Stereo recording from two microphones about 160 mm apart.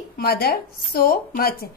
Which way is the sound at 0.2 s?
75° left (ahead or behind).